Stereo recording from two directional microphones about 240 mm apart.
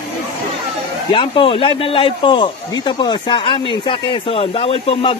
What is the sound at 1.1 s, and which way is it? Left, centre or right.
Speech, left.